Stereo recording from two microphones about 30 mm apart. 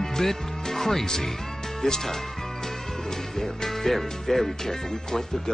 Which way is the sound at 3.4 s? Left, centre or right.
Centre.